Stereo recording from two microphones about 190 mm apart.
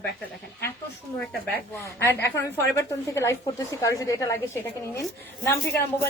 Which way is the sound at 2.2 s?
15° left (ahead or behind).